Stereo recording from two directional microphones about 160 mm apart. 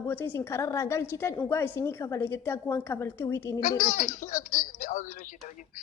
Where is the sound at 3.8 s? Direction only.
50° left (ahead or behind).